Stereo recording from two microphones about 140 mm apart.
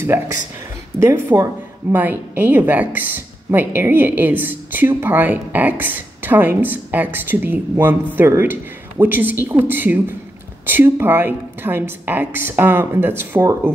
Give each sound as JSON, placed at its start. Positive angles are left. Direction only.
{"t": 0.1, "sound": "a woman's voice", "side_deg": -20}